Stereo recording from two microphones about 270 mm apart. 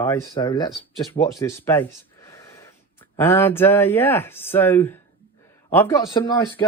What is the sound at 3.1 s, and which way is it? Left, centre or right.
Speech, centre.